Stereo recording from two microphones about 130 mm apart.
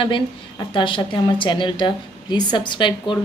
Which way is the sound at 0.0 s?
40° left (ahead or behind).